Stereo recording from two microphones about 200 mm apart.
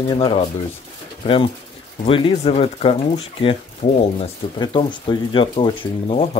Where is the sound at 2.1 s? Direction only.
25° left (ahead or behind).